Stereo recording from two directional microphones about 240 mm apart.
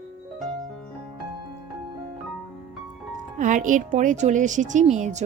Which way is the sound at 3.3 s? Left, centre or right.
Right.